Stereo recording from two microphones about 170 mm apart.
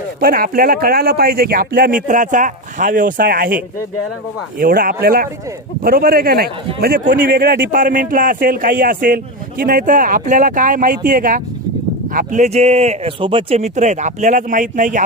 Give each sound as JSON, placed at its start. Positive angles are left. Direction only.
{"t": 0.2, "sound": "speech", "side_deg": -60}
{"t": 7.3, "sound": "speech", "side_deg": -65}